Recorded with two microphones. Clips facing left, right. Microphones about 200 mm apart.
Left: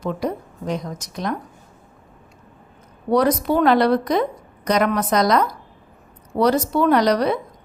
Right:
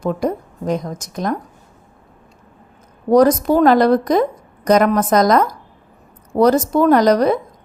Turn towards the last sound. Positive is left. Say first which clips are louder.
# right 4 dB
turn(degrees=-45)  # may be behind; listen again after turning